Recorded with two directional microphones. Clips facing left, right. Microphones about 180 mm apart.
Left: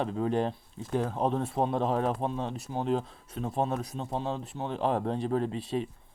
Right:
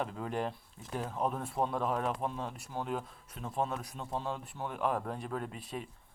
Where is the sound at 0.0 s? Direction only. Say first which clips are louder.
Left 7 dB; 25° left (ahead or behind).